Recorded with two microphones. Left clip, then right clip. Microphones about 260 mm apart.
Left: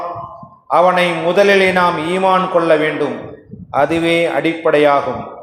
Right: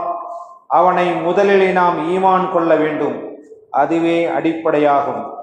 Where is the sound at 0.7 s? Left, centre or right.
Left.